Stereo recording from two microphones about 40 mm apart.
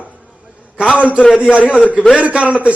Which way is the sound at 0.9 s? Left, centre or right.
Right.